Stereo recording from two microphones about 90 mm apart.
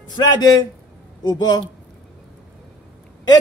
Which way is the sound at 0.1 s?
50° left (ahead or behind).